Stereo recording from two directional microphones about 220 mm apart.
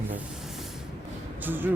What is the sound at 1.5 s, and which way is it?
Speech, 10° right (ahead or behind).